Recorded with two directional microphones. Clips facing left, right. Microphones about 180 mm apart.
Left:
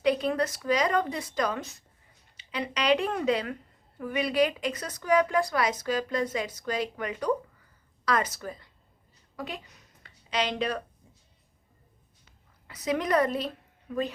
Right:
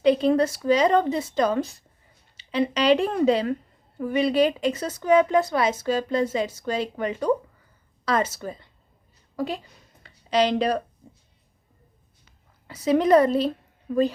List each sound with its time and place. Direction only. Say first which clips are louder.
0.0 s speech: right 7 dB; 25° right (ahead or behind)
9.3 s a sound: right 9 dB; 35° right (ahead or behind)
12.6 s a woman's voice: right 8 dB; 30° right (ahead or behind)